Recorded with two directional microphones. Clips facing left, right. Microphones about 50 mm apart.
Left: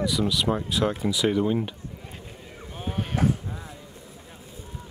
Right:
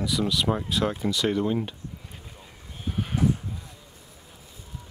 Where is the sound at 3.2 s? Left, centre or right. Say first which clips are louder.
Even; left.